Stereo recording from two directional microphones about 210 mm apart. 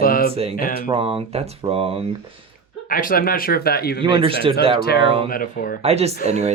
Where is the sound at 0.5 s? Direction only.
40° left (ahead or behind).